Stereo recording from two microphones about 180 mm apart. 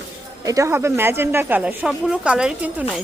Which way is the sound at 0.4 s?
15° right (ahead or behind).